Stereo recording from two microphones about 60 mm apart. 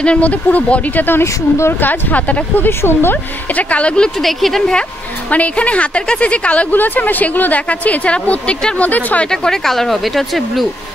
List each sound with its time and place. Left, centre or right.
0.0 s speech: left
1.2 s speech: left
1.8 s speech: left
2.8 s speech: left; by 4.1 s centre
4.2 s speech: centre
5.3 s speech: left
9.3 s speech: centre